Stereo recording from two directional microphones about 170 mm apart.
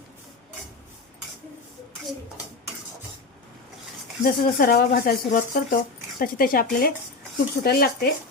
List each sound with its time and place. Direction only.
4.2 s speech: 65° left (ahead or behind)